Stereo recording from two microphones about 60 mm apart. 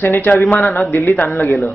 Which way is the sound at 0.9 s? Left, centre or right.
Left.